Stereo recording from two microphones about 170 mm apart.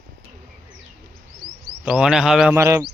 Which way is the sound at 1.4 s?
65° right (ahead or behind).